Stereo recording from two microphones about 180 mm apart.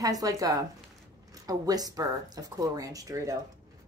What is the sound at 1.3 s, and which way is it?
Speech, 20° right (ahead or behind).